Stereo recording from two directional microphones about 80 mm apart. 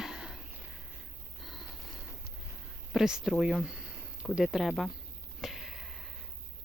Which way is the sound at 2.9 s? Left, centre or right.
Centre.